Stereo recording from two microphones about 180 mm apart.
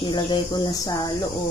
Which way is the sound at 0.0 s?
25° left (ahead or behind).